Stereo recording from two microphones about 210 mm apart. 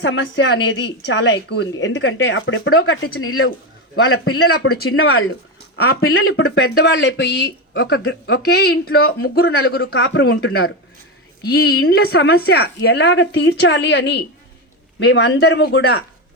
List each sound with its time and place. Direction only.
0.0 s a woman's voice: 60° left (ahead or behind); by 3.5 s 80° left
3.9 s a man's voice: 90° left
5.7 s speech: 50° left (ahead or behind)
6.1 s speech: 85° left
6.5 s speech: 55° left (ahead or behind)
11.4 s speech: 50° left (ahead or behind)